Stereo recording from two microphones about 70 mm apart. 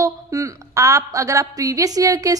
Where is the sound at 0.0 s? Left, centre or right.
Right.